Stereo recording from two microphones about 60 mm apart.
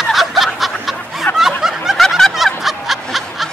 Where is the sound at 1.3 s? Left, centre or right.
Left.